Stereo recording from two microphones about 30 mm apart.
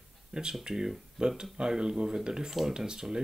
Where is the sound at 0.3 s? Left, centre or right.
Right.